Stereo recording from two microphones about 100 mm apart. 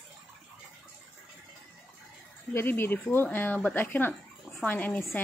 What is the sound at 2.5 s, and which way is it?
Speech, 20° left (ahead or behind).